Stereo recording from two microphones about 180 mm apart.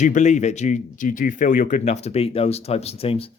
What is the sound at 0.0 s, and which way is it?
Speech, 40° left (ahead or behind).